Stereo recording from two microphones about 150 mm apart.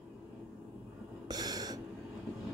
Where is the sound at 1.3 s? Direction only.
25° right (ahead or behind).